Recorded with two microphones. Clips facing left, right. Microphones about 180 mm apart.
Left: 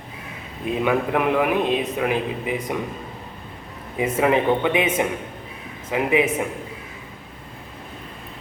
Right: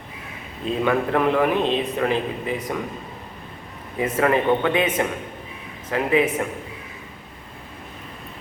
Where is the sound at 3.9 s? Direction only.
15° left (ahead or behind).